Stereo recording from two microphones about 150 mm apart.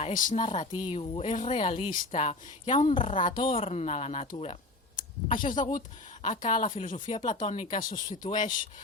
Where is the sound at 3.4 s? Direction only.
40° left (ahead or behind).